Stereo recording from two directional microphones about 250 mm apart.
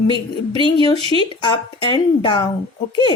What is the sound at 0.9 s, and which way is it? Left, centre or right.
Speech, right.